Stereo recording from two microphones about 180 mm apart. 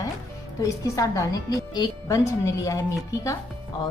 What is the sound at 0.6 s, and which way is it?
A woman's voice, 20° left (ahead or behind).